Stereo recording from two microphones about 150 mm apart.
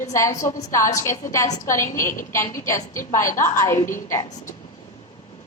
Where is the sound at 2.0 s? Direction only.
60° left (ahead or behind).